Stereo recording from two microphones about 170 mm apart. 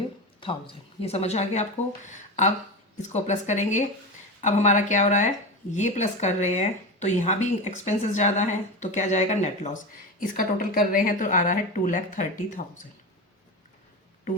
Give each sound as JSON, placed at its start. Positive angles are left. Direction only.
{"t": 0.3, "sound": "a woman's voice", "side_deg": 30}